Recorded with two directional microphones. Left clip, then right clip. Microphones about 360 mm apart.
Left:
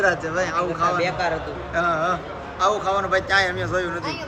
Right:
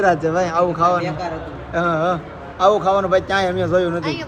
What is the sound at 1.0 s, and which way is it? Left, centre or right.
Speech, left.